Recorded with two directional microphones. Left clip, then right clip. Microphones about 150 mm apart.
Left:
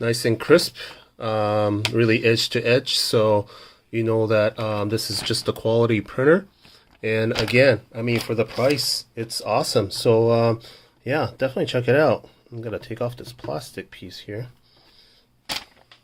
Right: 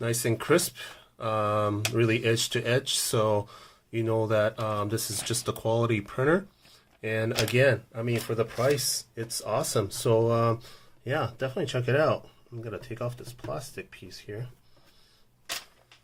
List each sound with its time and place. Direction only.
0.0 s speech: 20° left (ahead or behind)
9.4 s speech: 20° left (ahead or behind); by 14.3 s 45° left (ahead or behind)